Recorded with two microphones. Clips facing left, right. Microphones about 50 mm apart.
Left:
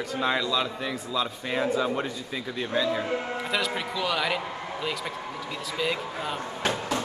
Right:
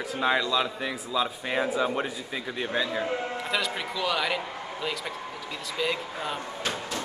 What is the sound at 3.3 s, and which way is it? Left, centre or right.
A man's voice, centre.